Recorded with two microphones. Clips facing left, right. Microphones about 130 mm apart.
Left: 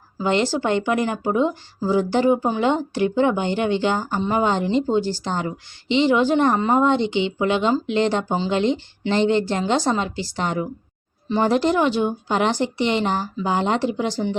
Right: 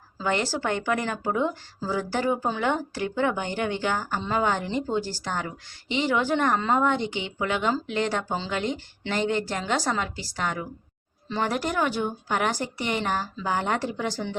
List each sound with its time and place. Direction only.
0.2 s speech: 20° left (ahead or behind)